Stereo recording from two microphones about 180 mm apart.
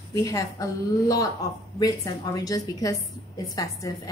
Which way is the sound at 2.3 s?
20° left (ahead or behind).